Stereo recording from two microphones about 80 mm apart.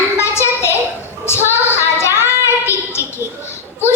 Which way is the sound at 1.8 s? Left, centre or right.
Left.